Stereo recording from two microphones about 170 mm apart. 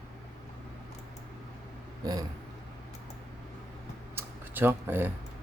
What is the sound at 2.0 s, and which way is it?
Speech, 20° right (ahead or behind).